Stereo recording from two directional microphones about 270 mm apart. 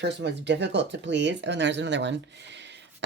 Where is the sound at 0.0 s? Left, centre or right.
Right.